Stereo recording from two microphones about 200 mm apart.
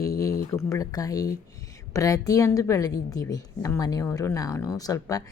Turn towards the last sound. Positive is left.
turn(degrees=15)  # may be behind; listen again after turning